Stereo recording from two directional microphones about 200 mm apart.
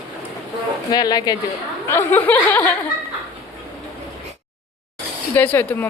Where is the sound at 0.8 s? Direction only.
20° left (ahead or behind).